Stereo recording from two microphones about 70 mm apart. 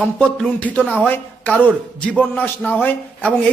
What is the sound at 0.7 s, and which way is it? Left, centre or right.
Speech, centre.